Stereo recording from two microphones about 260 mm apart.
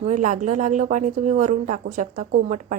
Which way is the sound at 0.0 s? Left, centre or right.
Right.